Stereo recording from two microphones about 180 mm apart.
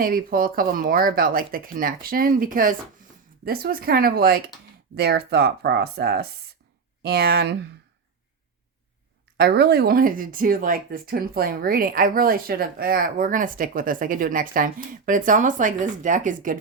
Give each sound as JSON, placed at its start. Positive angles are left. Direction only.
{"t": 0.0, "sound": "speech", "side_deg": -55}
{"t": 9.4, "sound": "speech", "side_deg": -60}